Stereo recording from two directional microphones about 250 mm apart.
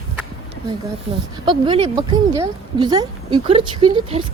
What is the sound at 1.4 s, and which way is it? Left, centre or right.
Speech, centre.